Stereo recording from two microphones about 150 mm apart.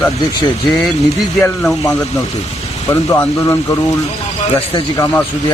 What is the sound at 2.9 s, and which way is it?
Speech, 15° left (ahead or behind).